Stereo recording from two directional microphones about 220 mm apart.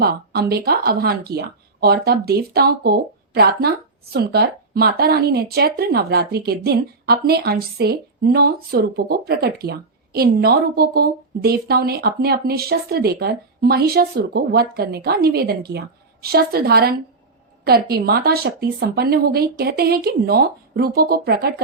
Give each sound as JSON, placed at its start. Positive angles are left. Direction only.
{"t": 0.0, "sound": "a woman's voice", "side_deg": -45}